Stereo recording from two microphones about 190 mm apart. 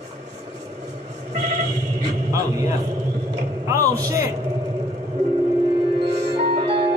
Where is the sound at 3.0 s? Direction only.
15° right (ahead or behind).